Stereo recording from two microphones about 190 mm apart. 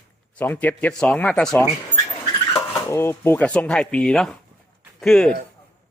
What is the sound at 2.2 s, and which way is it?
A man's voice, 20° left (ahead or behind).